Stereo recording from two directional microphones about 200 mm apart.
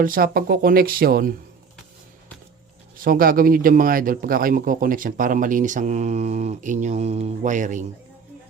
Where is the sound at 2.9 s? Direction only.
45° right (ahead or behind).